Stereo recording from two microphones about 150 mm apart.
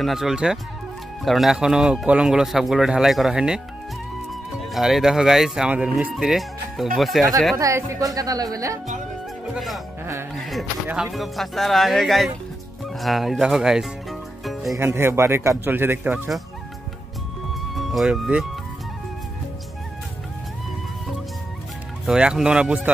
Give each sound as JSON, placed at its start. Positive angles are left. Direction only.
{"t": 0.0, "sound": "speech", "side_deg": 0}
{"t": 4.7, "sound": "speech", "side_deg": 0}
{"t": 7.5, "sound": "speech", "side_deg": -20}
{"t": 9.5, "sound": "speech", "side_deg": 0}
{"t": 10.3, "sound": "music", "side_deg": 0}
{"t": 10.9, "sound": "speech", "side_deg": -5}
{"t": 14.4, "sound": "music", "side_deg": 0}
{"t": 14.8, "sound": "a man's voice", "side_deg": -15}
{"t": 17.7, "sound": "speech", "side_deg": 0}
{"t": 22.0, "sound": "speech", "side_deg": -5}